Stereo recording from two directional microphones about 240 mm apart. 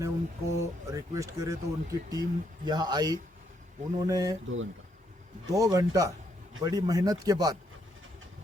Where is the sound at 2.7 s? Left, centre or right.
Centre.